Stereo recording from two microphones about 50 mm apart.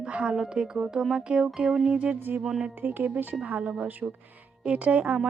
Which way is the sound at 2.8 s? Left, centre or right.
Right.